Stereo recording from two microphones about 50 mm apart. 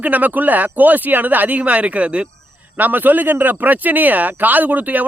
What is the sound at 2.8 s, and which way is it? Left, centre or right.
A man's voice, right.